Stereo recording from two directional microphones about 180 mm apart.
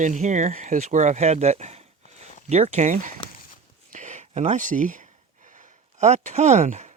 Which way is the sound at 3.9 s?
40° right (ahead or behind).